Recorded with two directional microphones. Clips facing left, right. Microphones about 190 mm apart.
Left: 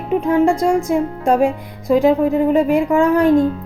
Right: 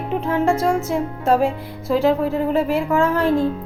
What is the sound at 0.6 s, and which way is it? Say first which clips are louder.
Speech: left 3 dB; 5° right (ahead or behind).